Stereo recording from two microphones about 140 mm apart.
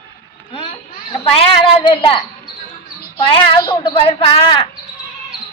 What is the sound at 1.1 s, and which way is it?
A woman's voice, 40° left (ahead or behind).